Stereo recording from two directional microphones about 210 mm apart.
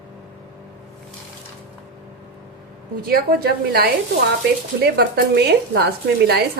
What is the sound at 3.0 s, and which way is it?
Speech, 45° right (ahead or behind).